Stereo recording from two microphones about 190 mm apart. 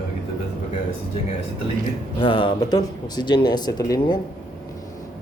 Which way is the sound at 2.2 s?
25° left (ahead or behind).